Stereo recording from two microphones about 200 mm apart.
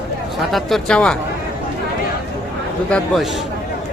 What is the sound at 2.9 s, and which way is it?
Speech, 5° left (ahead or behind).